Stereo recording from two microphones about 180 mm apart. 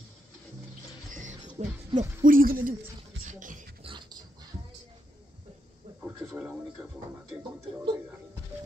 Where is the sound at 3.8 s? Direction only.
30° right (ahead or behind).